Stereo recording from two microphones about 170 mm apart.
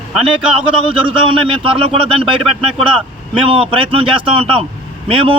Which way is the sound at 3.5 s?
30° right (ahead or behind).